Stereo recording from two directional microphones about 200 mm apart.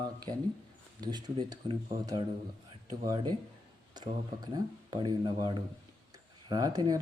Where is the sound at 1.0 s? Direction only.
20° right (ahead or behind).